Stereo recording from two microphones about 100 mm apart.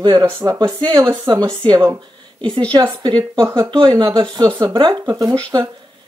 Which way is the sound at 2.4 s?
55° right (ahead or behind).